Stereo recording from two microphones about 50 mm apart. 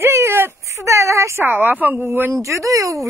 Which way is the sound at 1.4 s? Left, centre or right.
Right.